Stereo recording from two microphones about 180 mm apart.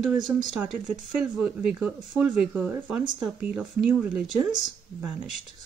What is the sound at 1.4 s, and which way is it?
Speech, 5° right (ahead or behind).